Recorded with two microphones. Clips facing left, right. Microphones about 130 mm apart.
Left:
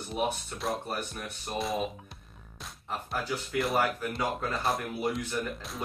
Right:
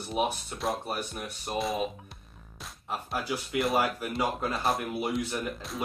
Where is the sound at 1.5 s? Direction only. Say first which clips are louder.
Right 1 dB; centre (ahead or behind).